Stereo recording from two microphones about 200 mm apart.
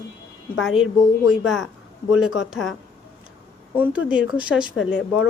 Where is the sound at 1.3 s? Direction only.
Centre (ahead or behind).